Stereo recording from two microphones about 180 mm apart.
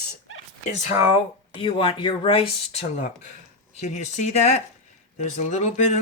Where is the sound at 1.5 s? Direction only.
30° left (ahead or behind).